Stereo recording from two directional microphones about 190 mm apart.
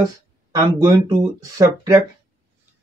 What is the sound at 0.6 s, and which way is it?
Speech, 20° right (ahead or behind).